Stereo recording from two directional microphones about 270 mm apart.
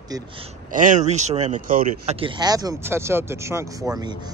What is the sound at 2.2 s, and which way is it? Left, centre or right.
Speech, centre.